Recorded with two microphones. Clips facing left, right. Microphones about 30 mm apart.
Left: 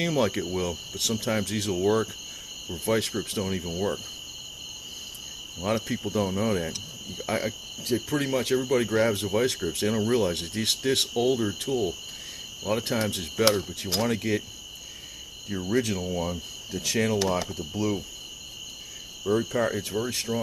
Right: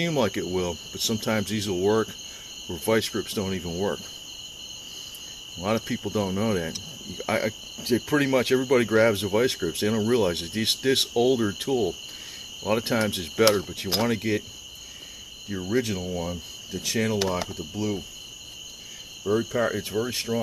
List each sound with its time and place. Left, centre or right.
0.0 s speech: centre
5.6 s speech: centre
15.4 s speech: centre
19.2 s speech: centre